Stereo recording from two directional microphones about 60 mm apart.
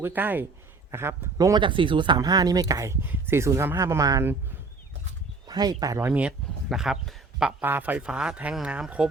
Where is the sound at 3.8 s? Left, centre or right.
Right.